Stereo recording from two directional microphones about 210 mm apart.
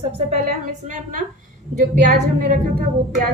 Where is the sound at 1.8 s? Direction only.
35° right (ahead or behind).